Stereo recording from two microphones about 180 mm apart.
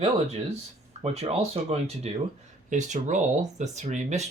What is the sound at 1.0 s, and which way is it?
Speech, 35° right (ahead or behind).